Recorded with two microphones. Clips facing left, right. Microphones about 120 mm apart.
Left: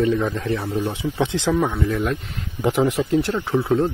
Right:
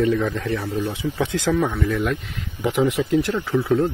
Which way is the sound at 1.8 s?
25° left (ahead or behind).